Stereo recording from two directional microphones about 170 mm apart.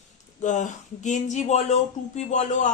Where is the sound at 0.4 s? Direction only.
45° left (ahead or behind).